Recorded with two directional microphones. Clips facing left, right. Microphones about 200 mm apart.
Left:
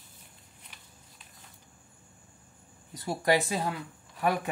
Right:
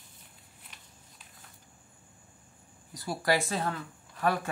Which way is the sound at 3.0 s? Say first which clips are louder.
Left 2 dB; 20° left (ahead or behind).